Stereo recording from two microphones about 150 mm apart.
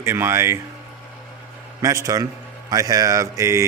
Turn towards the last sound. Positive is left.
turn(degrees=-20)  # may be behind; listen again after turning